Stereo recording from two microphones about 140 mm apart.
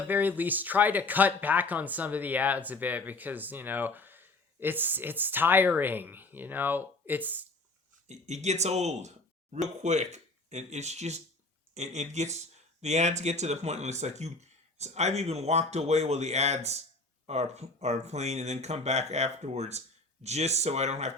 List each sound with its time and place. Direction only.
0.1 s speech: 15° right (ahead or behind)
8.0 s speech: 55° right (ahead or behind)